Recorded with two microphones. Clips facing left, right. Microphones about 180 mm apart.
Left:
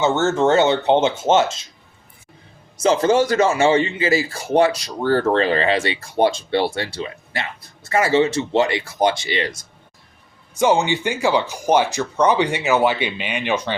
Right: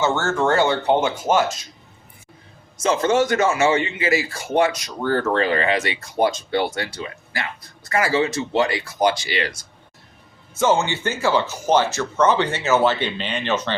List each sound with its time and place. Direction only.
0.0 s speech: 20° left (ahead or behind)
2.8 s speech: 30° left (ahead or behind); by 13.7 s 10° left (ahead or behind)